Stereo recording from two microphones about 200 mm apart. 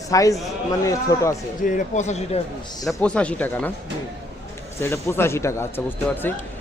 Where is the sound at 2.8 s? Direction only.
5° left (ahead or behind).